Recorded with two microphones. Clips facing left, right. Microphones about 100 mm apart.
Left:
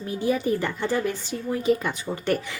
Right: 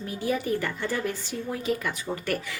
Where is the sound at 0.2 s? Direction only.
20° left (ahead or behind).